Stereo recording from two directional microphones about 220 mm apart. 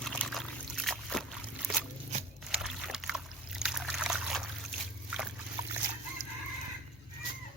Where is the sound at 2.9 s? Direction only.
Centre (ahead or behind).